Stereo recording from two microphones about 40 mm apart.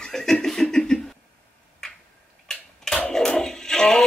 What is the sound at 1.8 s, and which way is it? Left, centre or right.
Tick-tock, centre.